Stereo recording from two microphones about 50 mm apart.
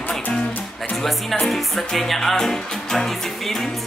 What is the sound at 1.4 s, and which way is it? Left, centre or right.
Music, centre.